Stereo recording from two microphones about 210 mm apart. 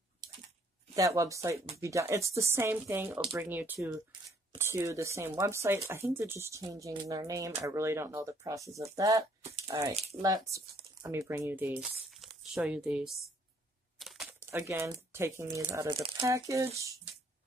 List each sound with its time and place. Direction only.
0.9 s speech: 15° right (ahead or behind)